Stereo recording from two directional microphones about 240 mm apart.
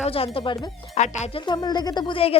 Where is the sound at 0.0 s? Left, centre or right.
Left.